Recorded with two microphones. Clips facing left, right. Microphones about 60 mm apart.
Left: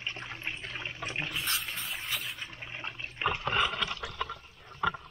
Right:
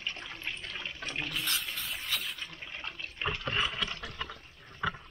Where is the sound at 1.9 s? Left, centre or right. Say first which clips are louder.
Right 1 dB; centre.